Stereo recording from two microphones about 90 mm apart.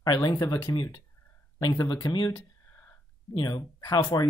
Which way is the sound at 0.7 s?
55° left (ahead or behind).